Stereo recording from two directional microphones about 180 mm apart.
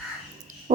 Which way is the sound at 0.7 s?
45° right (ahead or behind).